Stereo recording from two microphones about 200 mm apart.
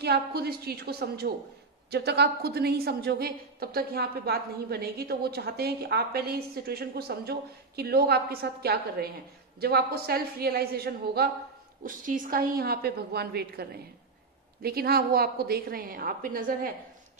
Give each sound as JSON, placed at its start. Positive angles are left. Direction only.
{"t": 0.0, "sound": "a woman's voice", "side_deg": -55}